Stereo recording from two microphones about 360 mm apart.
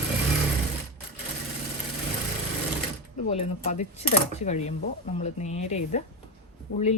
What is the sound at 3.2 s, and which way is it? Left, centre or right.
Speech, centre.